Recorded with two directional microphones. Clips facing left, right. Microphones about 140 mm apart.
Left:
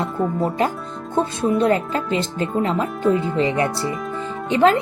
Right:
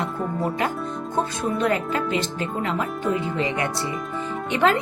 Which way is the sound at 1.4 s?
30° left (ahead or behind).